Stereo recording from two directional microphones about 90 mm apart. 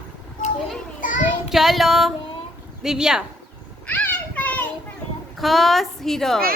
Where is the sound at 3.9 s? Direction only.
15° left (ahead or behind).